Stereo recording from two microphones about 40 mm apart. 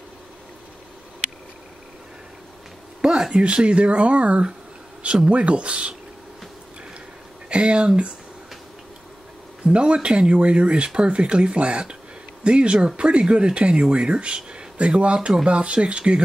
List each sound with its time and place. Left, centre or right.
3.0 s speech: centre
3.3 s speech: right
7.4 s speech: right
9.7 s speech: right
15.1 s speech: centre
15.4 s speech: right